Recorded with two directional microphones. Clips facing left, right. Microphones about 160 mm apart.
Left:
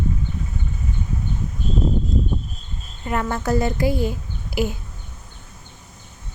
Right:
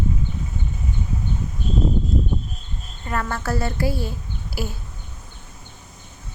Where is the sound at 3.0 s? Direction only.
15° left (ahead or behind).